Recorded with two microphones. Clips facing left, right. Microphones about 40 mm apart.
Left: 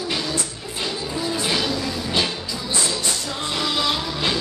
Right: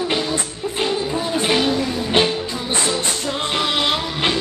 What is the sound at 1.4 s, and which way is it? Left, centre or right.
Music, right.